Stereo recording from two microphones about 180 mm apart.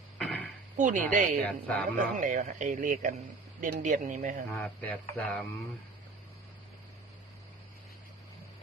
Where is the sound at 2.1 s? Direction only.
45° right (ahead or behind).